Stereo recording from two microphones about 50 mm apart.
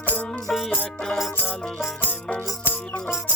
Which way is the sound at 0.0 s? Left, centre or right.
Left.